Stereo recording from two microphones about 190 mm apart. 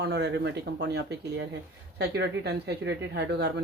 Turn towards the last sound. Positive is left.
turn(degrees=-65)  # may be behind; listen again after turning